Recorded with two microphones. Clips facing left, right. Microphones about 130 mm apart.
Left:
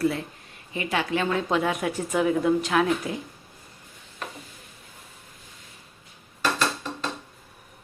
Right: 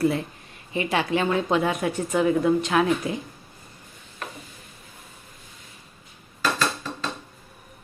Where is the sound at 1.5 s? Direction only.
Centre (ahead or behind).